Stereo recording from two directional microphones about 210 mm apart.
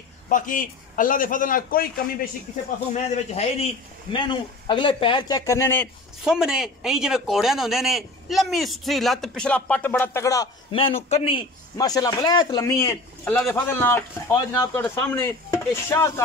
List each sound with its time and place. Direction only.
0.3 s a man's voice: 40° left (ahead or behind)
2.9 s a man's voice: 30° left (ahead or behind); by 5.9 s 10° left (ahead or behind)
6.2 s speech: 5° right (ahead or behind); by 16.1 s 10° left (ahead or behind)